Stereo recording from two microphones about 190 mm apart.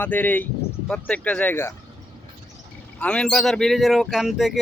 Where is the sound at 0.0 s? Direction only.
10° left (ahead or behind).